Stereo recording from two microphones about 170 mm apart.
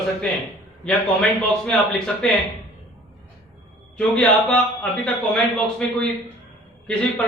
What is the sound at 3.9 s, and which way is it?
A man's voice, 5° left (ahead or behind).